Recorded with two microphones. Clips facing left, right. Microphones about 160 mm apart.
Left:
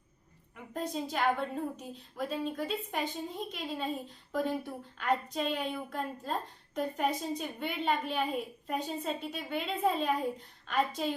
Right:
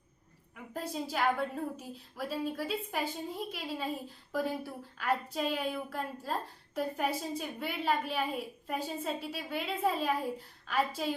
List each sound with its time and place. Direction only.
0.5 s a woman's voice: 5° right (ahead or behind)